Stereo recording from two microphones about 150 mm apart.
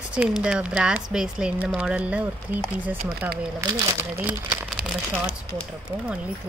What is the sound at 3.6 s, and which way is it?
Speech, 20° right (ahead or behind).